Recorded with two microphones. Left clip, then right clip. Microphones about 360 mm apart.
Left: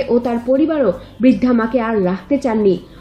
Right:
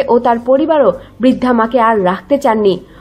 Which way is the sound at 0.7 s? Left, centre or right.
Right.